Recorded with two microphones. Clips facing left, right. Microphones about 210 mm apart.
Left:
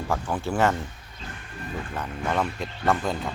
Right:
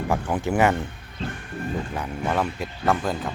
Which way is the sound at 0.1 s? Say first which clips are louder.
Right 3 dB; 15° right (ahead or behind).